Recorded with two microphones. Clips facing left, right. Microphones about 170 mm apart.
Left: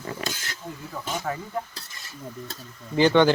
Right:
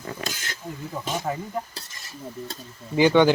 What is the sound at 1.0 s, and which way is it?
Speech, 20° right (ahead or behind).